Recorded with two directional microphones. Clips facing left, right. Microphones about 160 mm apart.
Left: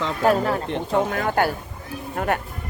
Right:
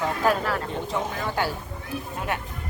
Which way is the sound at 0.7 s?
65° left (ahead or behind).